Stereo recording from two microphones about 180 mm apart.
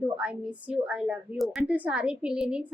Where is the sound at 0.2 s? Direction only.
5° right (ahead or behind).